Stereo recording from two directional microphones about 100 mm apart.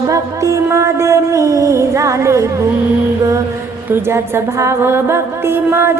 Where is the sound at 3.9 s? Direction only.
25° right (ahead or behind).